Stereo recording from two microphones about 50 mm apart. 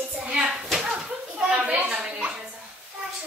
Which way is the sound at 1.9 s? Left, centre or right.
Centre.